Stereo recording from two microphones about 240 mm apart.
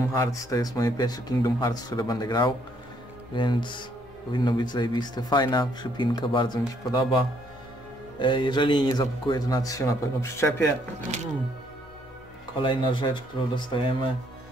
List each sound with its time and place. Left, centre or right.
0.1 s speech: centre
8.2 s speech: centre
12.5 s speech: left